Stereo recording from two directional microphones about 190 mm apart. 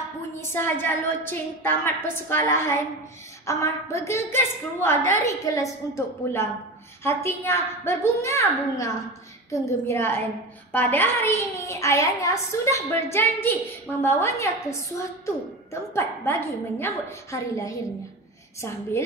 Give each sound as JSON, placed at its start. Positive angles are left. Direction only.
{"t": 0.4, "sound": "a child's voice", "side_deg": 10}
{"t": 15.9, "sound": "a child's voice", "side_deg": 10}